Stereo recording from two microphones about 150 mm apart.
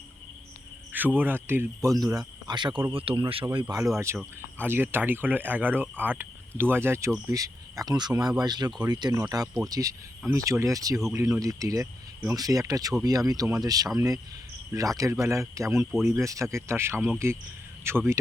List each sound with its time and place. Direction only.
0.9 s speech: 10° right (ahead or behind); by 3.8 s 30° right (ahead or behind)
3.8 s speech: 20° right (ahead or behind)